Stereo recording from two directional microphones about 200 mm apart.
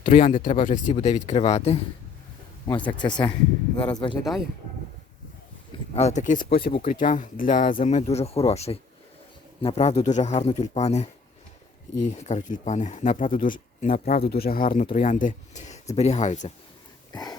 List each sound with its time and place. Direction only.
0.0 s speech: 40° left (ahead or behind)
3.0 s speech: 20° left (ahead or behind)
4.2 s speech: centre (ahead or behind)
5.9 s speech: 35° left (ahead or behind)
12.1 s speech: 35° left (ahead or behind)
17.1 s a sound: 20° left (ahead or behind)